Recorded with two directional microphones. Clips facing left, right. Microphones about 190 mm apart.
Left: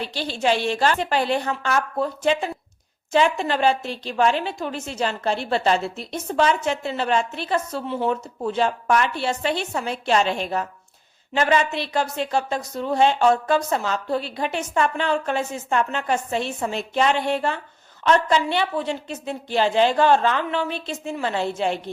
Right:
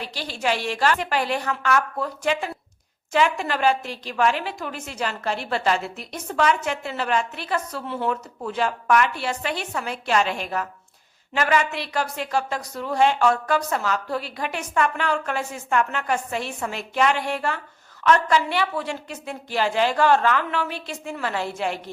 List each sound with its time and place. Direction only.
0.0 s speech: 25° left (ahead or behind)